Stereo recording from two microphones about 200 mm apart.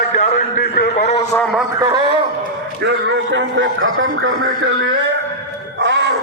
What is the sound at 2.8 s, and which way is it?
A man's voice, 60° right (ahead or behind).